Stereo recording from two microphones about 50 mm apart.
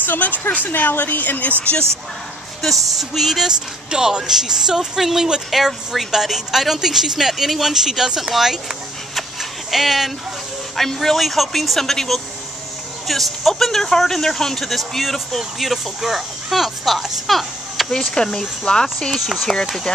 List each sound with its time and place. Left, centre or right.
0.0 s speech: left
1.6 s speech: left
2.6 s speech: centre
18.1 s speech: centre
18.9 s speech: centre